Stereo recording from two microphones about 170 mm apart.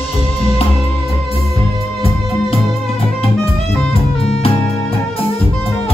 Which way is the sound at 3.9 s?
35° left (ahead or behind).